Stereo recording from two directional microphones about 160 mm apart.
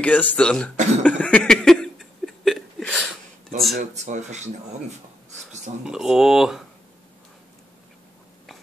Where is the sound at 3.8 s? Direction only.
50° right (ahead or behind).